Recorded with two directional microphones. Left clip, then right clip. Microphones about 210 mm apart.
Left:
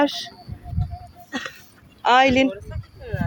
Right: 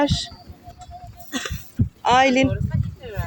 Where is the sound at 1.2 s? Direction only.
25° right (ahead or behind).